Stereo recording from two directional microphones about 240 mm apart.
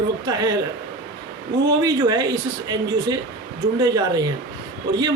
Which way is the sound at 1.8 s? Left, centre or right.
Centre.